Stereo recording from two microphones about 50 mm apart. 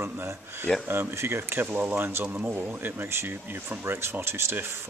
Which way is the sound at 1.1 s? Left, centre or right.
Right.